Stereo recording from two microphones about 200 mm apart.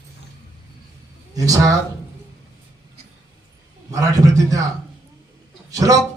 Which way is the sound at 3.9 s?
15° right (ahead or behind).